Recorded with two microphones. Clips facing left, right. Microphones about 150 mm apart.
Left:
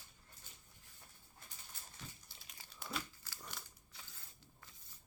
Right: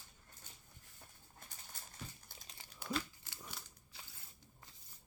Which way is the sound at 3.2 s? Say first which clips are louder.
Even; 20° right (ahead or behind).